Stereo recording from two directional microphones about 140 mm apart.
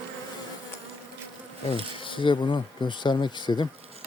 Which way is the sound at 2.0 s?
35° left (ahead or behind).